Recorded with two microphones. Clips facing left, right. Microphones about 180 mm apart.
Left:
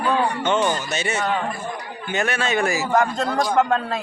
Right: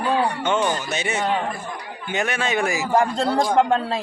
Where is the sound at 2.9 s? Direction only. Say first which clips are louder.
Right 2 dB; 30° right (ahead or behind).